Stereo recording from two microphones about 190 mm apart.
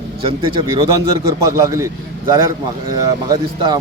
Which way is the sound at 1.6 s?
15° right (ahead or behind).